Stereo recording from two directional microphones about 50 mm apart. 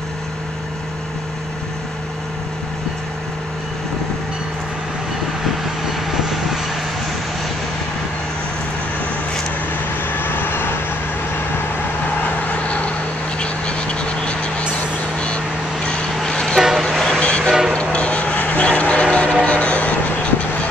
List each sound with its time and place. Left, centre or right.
6.1 s vehicle: centre
10.0 s vehicle: left
12.4 s vehicle: left
16.1 s vehicle: centre
16.5 s vehicle: centre
16.9 s vehicle: centre
17.2 s vehicle: left
17.5 s vehicle: centre
17.7 s vehicle: left